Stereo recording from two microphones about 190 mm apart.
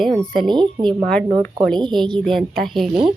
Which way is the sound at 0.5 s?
25° right (ahead or behind).